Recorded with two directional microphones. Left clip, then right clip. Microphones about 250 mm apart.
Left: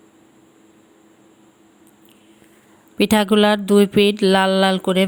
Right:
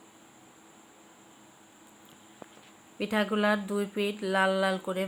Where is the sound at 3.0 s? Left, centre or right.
Left.